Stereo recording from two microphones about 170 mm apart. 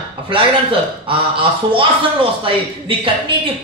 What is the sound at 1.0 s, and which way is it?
Speech, 30° right (ahead or behind).